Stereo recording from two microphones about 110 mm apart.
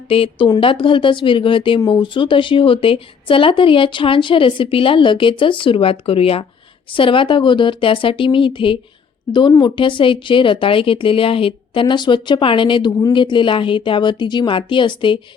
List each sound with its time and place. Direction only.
0.1 s speech: 55° left (ahead or behind)